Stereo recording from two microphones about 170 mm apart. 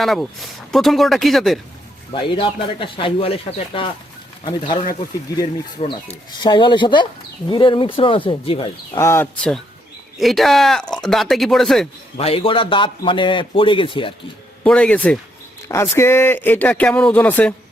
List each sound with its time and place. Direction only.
0.0 s speech: centre (ahead or behind)
2.3 s a man's voice: 30° left (ahead or behind)
4.4 s a man's voice: 30° left (ahead or behind)
9.0 s speech: 15° left (ahead or behind)
12.1 s a man's voice: 35° left (ahead or behind)
14.6 s speech: 5° left (ahead or behind)